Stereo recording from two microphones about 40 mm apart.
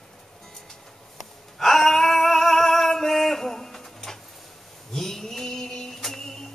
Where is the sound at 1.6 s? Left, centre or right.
Centre.